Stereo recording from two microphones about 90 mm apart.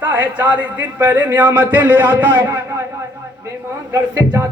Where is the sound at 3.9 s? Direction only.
45° right (ahead or behind).